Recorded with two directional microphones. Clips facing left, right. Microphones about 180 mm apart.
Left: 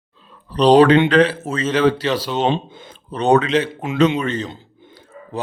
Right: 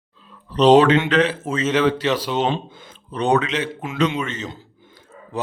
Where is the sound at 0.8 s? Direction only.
35° left (ahead or behind).